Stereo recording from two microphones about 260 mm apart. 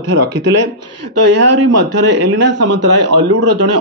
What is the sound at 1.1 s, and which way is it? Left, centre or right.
Speech, right.